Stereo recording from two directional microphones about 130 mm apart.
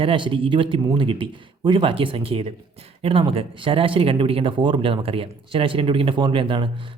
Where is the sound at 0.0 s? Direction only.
45° right (ahead or behind).